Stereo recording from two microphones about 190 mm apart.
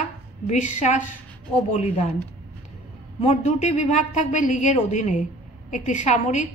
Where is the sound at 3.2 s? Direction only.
35° left (ahead or behind).